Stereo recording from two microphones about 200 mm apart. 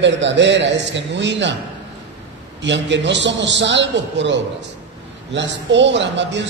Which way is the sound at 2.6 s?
60° right (ahead or behind).